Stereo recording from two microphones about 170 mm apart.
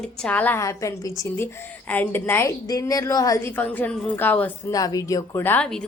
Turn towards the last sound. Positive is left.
turn(degrees=5)  # may be behind; listen again after turning